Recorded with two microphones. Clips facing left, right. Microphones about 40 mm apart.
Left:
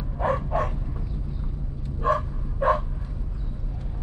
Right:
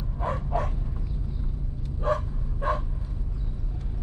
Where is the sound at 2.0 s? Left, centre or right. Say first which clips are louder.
Left 3 dB; left.